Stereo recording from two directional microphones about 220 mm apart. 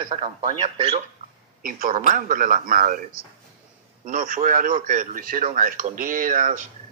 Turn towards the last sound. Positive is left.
turn(degrees=-35)  # may be behind; listen again after turning